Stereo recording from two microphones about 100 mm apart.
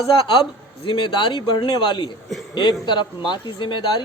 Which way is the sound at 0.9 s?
55° left (ahead or behind).